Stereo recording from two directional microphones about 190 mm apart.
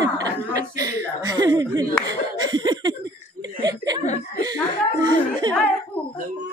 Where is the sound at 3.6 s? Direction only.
20° right (ahead or behind).